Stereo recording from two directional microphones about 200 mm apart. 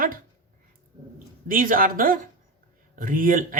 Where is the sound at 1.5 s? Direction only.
45° right (ahead or behind).